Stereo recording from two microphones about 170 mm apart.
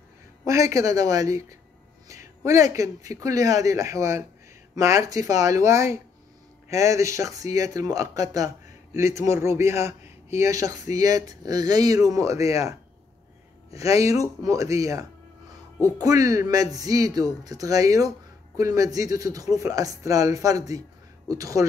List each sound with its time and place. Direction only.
0.5 s speech: 20° right (ahead or behind)